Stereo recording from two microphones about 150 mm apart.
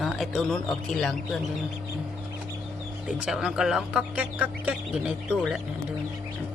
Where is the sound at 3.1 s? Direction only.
5° right (ahead or behind).